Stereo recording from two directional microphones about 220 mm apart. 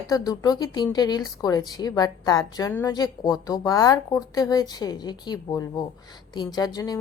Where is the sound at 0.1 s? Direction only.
15° left (ahead or behind).